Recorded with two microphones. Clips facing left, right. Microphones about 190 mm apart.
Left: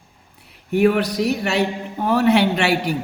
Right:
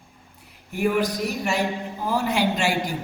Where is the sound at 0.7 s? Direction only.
70° left (ahead or behind).